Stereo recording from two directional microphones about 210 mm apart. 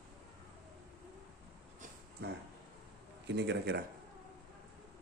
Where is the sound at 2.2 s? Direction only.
50° right (ahead or behind).